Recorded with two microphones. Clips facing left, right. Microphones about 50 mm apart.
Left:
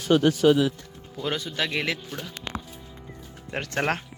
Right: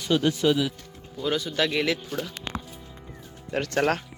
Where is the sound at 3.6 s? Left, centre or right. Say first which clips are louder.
Right 3 dB; left.